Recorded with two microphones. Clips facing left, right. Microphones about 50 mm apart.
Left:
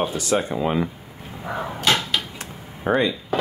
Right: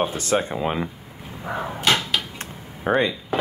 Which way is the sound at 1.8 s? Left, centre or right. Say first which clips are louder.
Even; centre.